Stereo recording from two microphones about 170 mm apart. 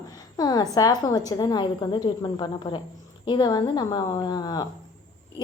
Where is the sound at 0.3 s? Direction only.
20° left (ahead or behind).